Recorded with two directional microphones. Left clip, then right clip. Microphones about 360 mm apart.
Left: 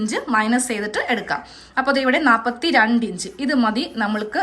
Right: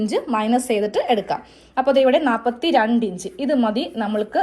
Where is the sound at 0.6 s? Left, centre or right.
Centre.